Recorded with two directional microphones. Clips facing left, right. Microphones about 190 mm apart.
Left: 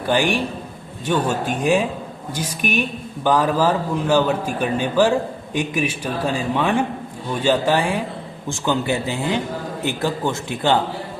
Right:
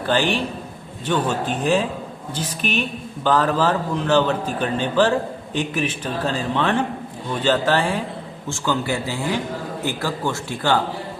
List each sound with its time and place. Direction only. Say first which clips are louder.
0.0 s a man's voice: left 1 dB; 15° left (ahead or behind)